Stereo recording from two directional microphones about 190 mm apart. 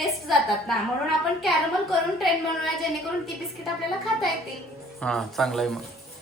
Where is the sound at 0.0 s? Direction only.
Centre (ahead or behind).